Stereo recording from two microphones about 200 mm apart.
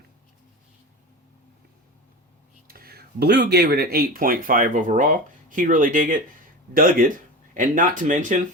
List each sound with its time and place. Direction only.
2.6 s speech: 50° right (ahead or behind)